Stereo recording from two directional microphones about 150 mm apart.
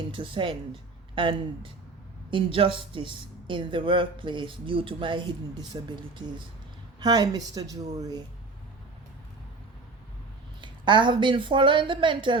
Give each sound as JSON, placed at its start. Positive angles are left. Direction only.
{"t": 0.1, "sound": "a woman's voice", "side_deg": -35}
{"t": 10.6, "sound": "speech", "side_deg": -30}